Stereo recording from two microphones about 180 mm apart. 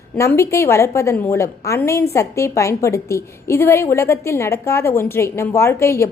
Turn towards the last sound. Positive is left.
turn(degrees=15)  # may be behind; listen again after turning